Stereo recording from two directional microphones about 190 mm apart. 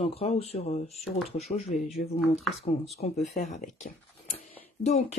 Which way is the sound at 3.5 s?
40° left (ahead or behind).